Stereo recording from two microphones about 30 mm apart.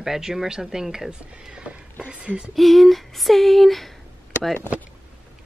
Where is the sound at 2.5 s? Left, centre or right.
Centre.